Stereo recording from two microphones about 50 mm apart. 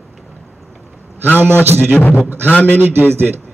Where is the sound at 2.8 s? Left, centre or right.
Right.